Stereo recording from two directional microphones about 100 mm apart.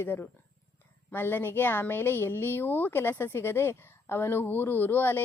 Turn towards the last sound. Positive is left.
turn(degrees=20)  # may be behind; listen again after turning